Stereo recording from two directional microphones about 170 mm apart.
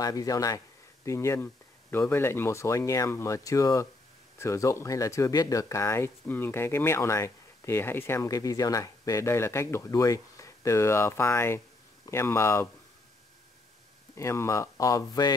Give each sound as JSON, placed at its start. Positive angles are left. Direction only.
{"t": 0.0, "sound": "speech", "side_deg": 20}
{"t": 14.1, "sound": "speech", "side_deg": 15}